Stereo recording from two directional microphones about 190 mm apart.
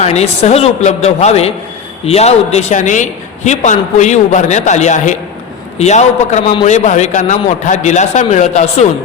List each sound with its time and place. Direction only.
0.0 s a man's voice: 35° left (ahead or behind)